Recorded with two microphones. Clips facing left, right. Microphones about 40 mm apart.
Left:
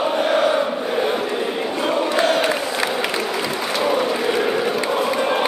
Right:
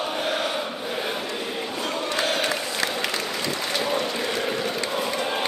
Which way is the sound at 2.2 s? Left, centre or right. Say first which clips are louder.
Left 6 dB; centre.